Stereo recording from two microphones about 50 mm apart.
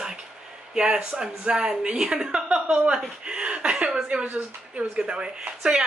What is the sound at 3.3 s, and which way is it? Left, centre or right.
Chuckle, right.